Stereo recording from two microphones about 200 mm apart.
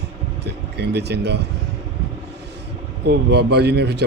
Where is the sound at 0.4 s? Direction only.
55° right (ahead or behind).